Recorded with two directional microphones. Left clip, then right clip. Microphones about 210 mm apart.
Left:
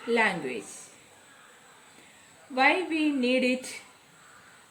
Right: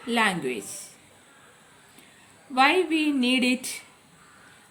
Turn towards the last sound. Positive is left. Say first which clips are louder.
# right 2 dB
turn(degrees=-30)  # may be behind; listen again after turning